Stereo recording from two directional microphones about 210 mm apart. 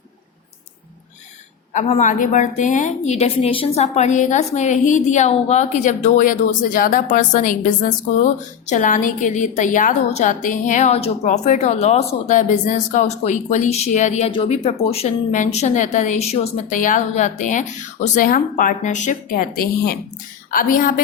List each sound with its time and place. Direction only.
1.7 s a woman's voice: 35° left (ahead or behind)